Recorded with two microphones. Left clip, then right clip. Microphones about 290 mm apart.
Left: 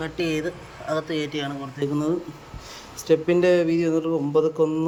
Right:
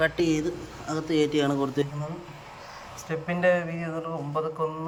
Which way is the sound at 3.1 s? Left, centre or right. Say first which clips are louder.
Left 6 dB; centre.